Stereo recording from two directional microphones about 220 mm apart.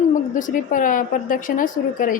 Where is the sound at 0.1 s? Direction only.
35° left (ahead or behind).